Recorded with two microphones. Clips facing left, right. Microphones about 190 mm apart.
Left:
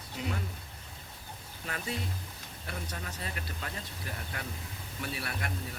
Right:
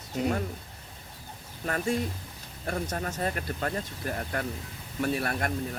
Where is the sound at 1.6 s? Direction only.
45° right (ahead or behind).